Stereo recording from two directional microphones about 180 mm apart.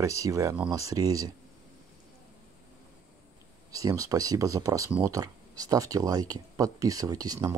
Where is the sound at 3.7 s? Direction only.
20° right (ahead or behind).